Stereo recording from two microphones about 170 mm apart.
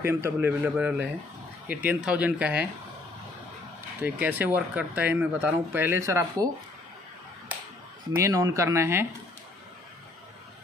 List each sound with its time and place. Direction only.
0.0 s speech: 15° right (ahead or behind)
4.0 s speech: 10° right (ahead or behind)
8.2 s speech: 20° right (ahead or behind)